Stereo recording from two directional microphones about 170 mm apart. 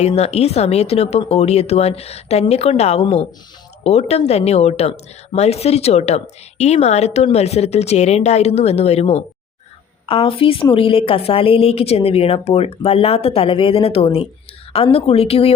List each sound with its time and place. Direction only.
0.0 s a woman's voice: 40° left (ahead or behind)